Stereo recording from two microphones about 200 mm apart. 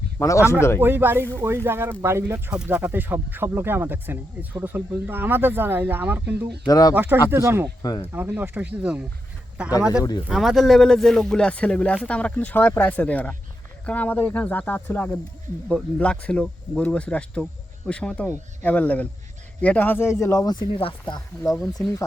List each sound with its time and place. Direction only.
0.2 s speech: 15° left (ahead or behind)
0.8 s speech: 10° right (ahead or behind)
6.7 s speech: 20° left (ahead or behind)
6.9 s speech: 10° right (ahead or behind)
7.8 s speech: 20° left (ahead or behind)
8.1 s speech: 10° right (ahead or behind)
9.9 s speech: 15° left (ahead or behind)
10.2 s speech: centre (ahead or behind); by 20.9 s 25° left (ahead or behind)